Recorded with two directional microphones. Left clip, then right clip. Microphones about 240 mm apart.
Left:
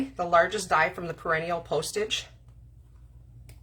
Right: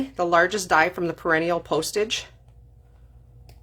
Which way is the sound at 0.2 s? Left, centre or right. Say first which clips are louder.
Right 3 dB; right.